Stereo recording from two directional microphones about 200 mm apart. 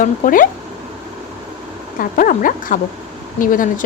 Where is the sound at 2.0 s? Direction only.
45° left (ahead or behind).